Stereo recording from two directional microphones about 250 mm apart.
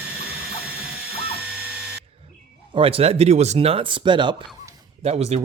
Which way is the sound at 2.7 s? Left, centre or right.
Right.